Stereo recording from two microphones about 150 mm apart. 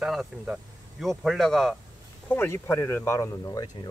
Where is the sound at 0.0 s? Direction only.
Centre (ahead or behind).